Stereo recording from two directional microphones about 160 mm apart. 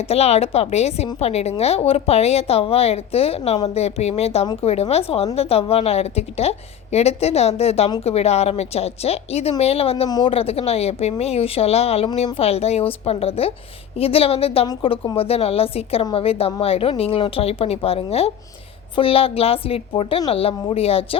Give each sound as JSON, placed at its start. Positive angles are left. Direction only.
{"t": 0.1, "sound": "a woman's voice", "side_deg": 40}
{"t": 10.1, "sound": "speech", "side_deg": 25}
{"t": 10.3, "sound": "a woman's voice", "side_deg": 35}